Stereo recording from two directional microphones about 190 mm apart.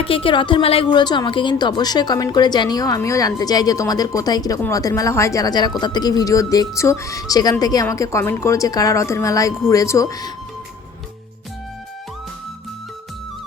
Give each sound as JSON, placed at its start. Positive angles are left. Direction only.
{"t": 0.0, "sound": "a woman's voice", "side_deg": 30}